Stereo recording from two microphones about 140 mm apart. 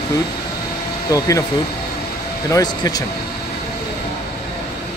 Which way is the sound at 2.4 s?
25° left (ahead or behind).